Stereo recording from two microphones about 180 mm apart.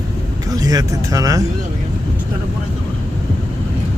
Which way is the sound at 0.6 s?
20° right (ahead or behind).